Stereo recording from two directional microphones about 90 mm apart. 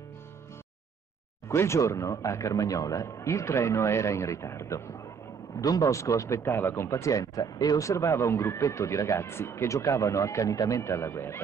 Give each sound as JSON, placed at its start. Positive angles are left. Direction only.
{"t": 1.5, "sound": "speech", "side_deg": 30}
{"t": 5.6, "sound": "speech", "side_deg": 45}